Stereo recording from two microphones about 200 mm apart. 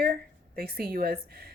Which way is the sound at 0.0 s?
45° right (ahead or behind).